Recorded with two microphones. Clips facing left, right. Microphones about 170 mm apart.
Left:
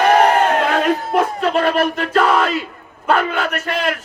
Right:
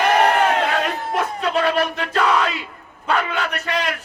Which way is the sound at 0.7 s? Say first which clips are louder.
Left 6 dB; 45° left (ahead or behind).